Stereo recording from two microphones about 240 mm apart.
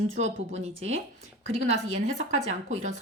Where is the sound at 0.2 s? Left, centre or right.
Right.